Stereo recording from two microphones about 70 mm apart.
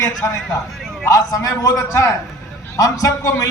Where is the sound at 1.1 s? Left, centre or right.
Left.